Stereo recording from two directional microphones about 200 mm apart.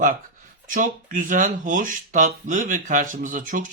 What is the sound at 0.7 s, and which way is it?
Speech, 40° right (ahead or behind).